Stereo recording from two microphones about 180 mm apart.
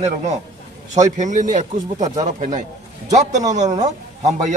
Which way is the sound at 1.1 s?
45° right (ahead or behind).